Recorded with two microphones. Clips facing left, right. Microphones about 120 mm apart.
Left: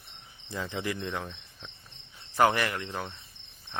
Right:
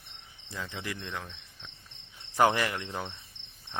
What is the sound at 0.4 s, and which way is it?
Cricket, 35° left (ahead or behind).